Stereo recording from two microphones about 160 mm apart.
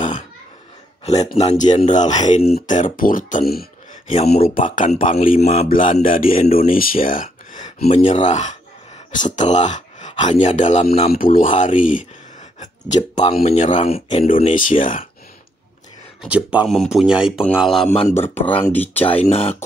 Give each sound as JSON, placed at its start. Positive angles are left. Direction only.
{"t": 1.0, "sound": "speech", "side_deg": 40}
{"t": 11.1, "sound": "speech", "side_deg": 60}
{"t": 14.4, "sound": "speech", "side_deg": 55}
{"t": 16.3, "sound": "speech", "side_deg": -10}
{"t": 18.0, "sound": "speech", "side_deg": 15}
{"t": 19.0, "sound": "speech", "side_deg": 40}